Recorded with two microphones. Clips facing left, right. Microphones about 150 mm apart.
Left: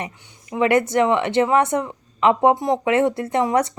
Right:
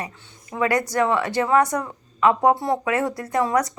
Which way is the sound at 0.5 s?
25° left (ahead or behind).